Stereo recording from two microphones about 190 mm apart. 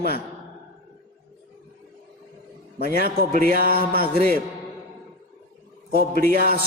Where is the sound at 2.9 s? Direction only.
50° right (ahead or behind).